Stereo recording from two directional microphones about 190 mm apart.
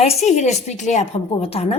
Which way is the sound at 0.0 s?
35° left (ahead or behind).